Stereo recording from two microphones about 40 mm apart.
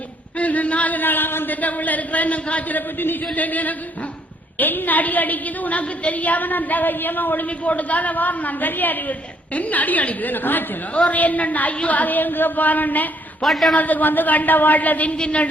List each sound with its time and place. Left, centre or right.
0.3 s speech: left
1.6 s a man's voice: left
7.4 s a man's voice: left
11.1 s a man's voice: left
13.4 s a man's voice: centre
13.7 s a woman's voice: left
15.2 s a woman's voice: left